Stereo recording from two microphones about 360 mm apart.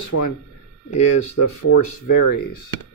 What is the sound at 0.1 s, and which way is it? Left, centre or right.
Speech, left.